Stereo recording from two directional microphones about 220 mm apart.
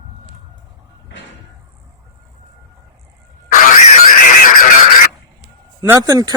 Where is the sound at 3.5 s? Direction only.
40° left (ahead or behind).